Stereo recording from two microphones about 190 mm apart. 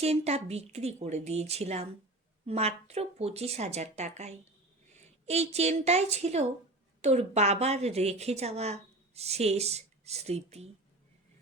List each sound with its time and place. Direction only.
0.0 s a woman's voice: 35° right (ahead or behind)